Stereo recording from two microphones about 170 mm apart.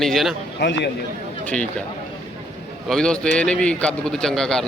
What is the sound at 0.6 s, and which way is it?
Speech, 85° left.